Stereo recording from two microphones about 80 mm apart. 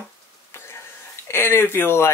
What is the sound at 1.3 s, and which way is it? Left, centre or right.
Speech, left.